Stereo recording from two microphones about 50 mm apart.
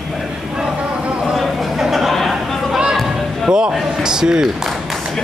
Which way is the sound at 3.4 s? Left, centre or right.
Centre.